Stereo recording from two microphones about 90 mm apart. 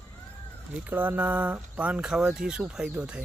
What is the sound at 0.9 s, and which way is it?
Speech, 20° right (ahead or behind).